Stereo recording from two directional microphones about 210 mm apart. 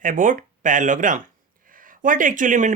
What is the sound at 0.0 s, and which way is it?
Speech, 40° right (ahead or behind).